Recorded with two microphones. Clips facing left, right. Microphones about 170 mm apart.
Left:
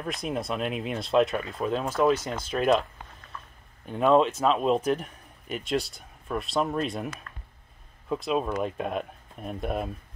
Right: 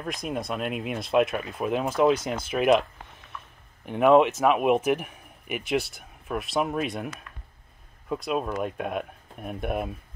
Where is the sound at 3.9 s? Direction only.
15° right (ahead or behind).